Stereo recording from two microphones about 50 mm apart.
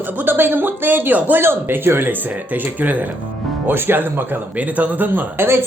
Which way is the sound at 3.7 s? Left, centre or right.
Right.